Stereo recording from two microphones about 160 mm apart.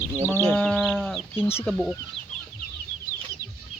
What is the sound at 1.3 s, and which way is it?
Speech, 15° left (ahead or behind).